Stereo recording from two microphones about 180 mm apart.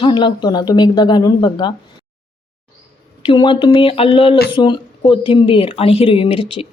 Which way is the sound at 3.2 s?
25° left (ahead or behind).